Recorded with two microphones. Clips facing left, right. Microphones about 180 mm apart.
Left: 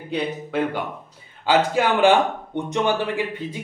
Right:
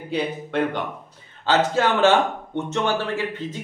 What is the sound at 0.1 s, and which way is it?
A man's voice, centre (ahead or behind).